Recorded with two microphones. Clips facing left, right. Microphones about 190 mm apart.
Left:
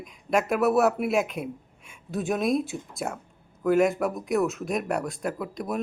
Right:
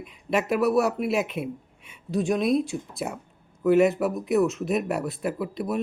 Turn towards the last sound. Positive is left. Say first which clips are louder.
# right 2 dB
turn(degrees=-5)  # may be behind; listen again after turning